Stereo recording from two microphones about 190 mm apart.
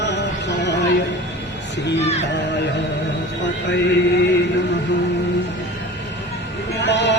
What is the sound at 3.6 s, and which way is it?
Music, 65° left (ahead or behind).